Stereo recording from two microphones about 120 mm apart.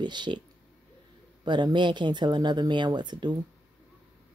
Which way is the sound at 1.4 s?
40° right (ahead or behind).